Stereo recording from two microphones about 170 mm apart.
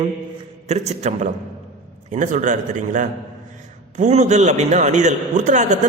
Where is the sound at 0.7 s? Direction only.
40° right (ahead or behind).